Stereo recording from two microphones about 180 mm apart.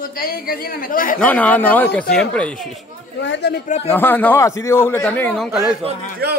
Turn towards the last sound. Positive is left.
turn(degrees=-60)  # may be behind; listen again after turning